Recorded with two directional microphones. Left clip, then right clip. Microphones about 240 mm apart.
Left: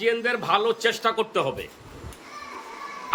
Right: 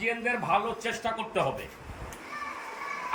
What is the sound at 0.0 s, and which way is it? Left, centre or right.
A man's voice, centre.